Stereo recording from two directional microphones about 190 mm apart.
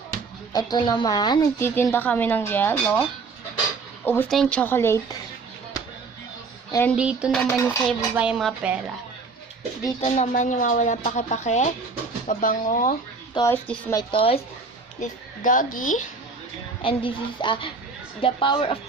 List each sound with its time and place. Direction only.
0.5 s a woman's voice: 20° left (ahead or behind)
6.7 s speech: 15° left (ahead or behind)
6.9 s speech: 5° right (ahead or behind)
7.3 s a woman's voice: 5° left (ahead or behind)
7.9 s speech: 5° right (ahead or behind)
10.0 s a woman's voice: 35° left (ahead or behind)
13.3 s a woman's voice: 15° left (ahead or behind)
14.1 s a woman's voice: 30° left (ahead or behind)
15.0 s a woman's voice: 45° left (ahead or behind)
16.8 s a woman's voice: 25° left (ahead or behind)